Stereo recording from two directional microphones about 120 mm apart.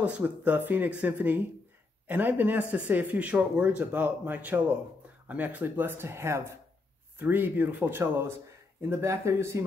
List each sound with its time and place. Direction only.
0.0 s speech: 10° right (ahead or behind)